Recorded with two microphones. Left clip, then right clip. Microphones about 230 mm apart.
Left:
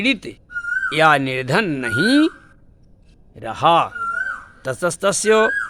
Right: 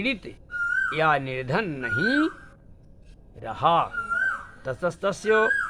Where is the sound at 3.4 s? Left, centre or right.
Left.